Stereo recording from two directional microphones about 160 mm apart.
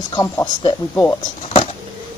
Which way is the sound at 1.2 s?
35° left (ahead or behind).